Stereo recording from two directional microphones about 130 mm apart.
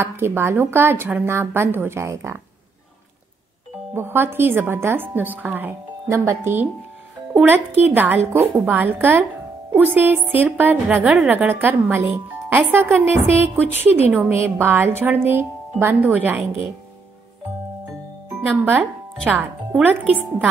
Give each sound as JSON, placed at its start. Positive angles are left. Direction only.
{"t": 0.0, "sound": "a woman's voice", "side_deg": -20}
{"t": 3.9, "sound": "a woman's voice", "side_deg": -15}
{"t": 19.2, "sound": "a woman's voice", "side_deg": -15}